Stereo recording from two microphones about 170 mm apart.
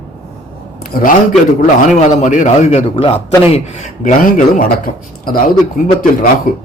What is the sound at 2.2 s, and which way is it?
A man's voice, 45° left (ahead or behind).